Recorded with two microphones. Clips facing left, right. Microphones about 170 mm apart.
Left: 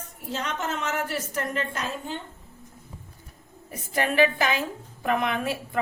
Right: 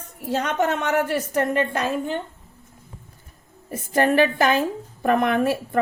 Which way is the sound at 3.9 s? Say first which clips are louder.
Right 4 dB; 50° right (ahead or behind).